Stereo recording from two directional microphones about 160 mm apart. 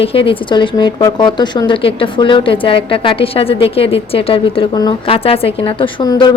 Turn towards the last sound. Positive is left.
turn(degrees=30)  # may be behind; listen again after turning